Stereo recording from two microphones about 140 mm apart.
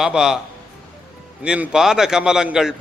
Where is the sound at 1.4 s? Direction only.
5° right (ahead or behind).